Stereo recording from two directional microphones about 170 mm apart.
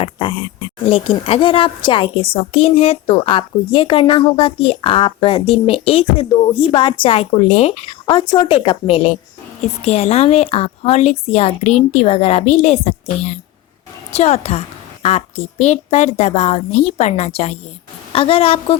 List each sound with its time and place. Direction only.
0.0 s speech: 30° left (ahead or behind)